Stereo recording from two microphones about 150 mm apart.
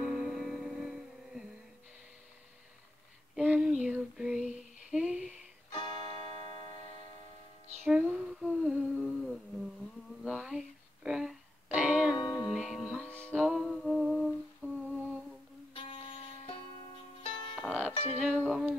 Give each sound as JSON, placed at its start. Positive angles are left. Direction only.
{"t": 0.2, "sound": "music", "side_deg": 0}
{"t": 3.3, "sound": "female singing", "side_deg": -5}
{"t": 5.7, "sound": "music", "side_deg": 35}
{"t": 7.8, "sound": "humming", "side_deg": 0}
{"t": 10.2, "sound": "a sound", "side_deg": -5}
{"t": 11.1, "sound": "music", "side_deg": -5}
{"t": 12.2, "sound": "music", "side_deg": 30}
{"t": 12.4, "sound": "music", "side_deg": 0}
{"t": 14.6, "sound": "humming", "side_deg": -5}
{"t": 15.7, "sound": "music", "side_deg": 35}
{"t": 17.6, "sound": "music", "side_deg": -5}